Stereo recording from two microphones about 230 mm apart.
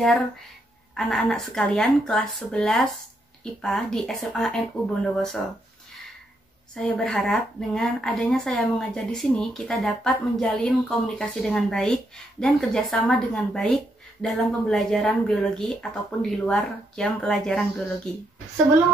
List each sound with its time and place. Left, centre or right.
0.9 s a woman's voice: centre
6.7 s a woman's voice: centre